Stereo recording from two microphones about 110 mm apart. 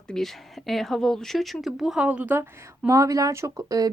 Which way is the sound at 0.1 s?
Centre (ahead or behind).